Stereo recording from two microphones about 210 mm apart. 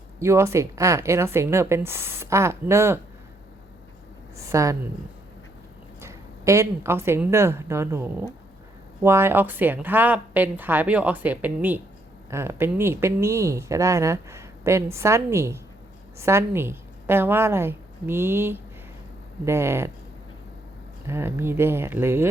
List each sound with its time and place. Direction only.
0.2 s speech: 15° right (ahead or behind)
4.4 s a woman's voice: 15° right (ahead or behind)
6.0 s speech: 15° right (ahead or behind)
21.1 s speech: 10° right (ahead or behind)